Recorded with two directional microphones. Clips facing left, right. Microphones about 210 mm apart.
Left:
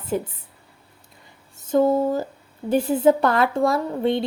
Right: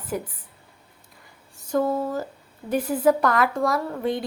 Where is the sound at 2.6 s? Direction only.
25° left (ahead or behind).